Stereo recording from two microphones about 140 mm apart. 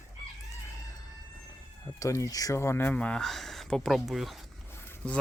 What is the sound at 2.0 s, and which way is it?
Speech, 25° left (ahead or behind).